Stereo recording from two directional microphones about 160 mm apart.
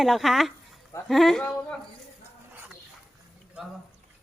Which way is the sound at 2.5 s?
10° right (ahead or behind).